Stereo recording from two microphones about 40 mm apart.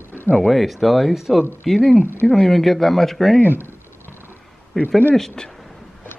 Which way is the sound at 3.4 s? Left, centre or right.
Right.